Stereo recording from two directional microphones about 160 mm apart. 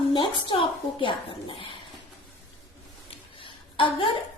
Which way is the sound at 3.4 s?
35° left (ahead or behind).